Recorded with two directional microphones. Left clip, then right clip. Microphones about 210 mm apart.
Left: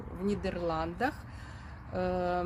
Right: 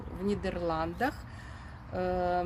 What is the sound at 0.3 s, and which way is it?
Speech, centre (ahead or behind).